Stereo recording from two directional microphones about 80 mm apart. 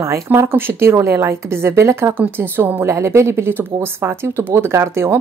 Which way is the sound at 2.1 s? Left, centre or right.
Right.